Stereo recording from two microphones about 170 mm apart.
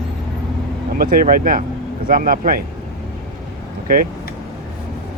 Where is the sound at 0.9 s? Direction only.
60° right (ahead or behind).